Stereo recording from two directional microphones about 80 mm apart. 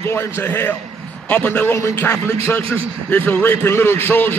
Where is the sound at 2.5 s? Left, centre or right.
Centre.